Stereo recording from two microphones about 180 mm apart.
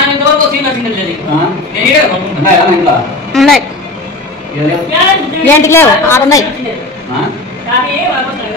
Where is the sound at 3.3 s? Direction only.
Centre (ahead or behind).